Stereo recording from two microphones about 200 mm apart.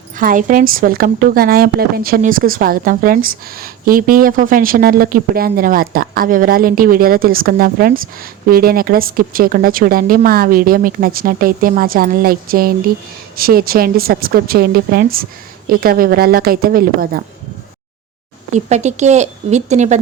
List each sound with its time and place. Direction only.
0.2 s a woman's voice: 40° right (ahead or behind)
18.5 s a woman's voice: 35° right (ahead or behind)